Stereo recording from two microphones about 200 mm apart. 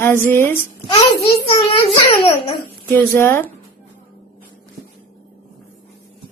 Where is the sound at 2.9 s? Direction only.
10° left (ahead or behind).